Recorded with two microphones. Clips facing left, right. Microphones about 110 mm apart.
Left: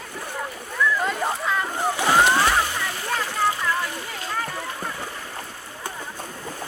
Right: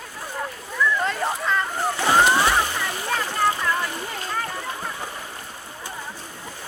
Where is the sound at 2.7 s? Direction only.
10° right (ahead or behind).